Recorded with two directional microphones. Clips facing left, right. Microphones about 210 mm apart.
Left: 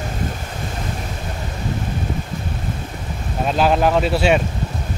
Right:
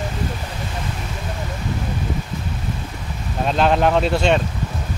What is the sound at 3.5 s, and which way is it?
Speech, 5° left (ahead or behind).